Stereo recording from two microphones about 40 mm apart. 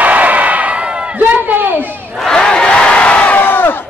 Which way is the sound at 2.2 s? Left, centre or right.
Centre.